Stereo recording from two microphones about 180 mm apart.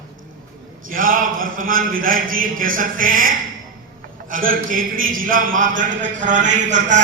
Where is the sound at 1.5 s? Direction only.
50° right (ahead or behind).